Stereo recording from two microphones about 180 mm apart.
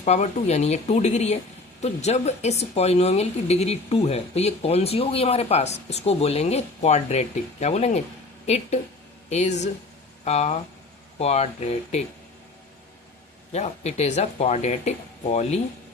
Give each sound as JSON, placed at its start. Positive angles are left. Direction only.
{"t": 0.0, "sound": "speech", "side_deg": 40}
{"t": 13.5, "sound": "speech", "side_deg": 35}